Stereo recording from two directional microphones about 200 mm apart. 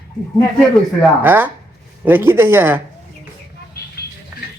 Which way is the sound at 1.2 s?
10° right (ahead or behind).